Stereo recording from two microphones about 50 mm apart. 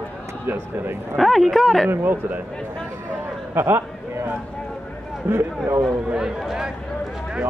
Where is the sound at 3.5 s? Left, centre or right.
Right.